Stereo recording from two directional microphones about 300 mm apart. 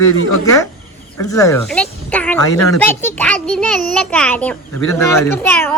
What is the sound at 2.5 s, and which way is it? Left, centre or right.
Speech, left.